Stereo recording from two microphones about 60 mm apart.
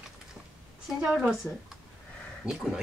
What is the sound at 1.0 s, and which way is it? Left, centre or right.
Speech, centre.